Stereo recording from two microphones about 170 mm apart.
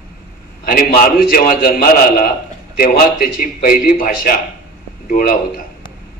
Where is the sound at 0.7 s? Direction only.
55° left (ahead or behind).